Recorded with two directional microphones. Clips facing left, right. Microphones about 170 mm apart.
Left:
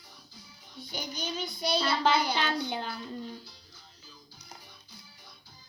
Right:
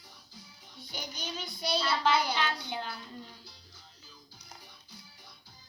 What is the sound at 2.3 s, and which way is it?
Speech, 30° left (ahead or behind).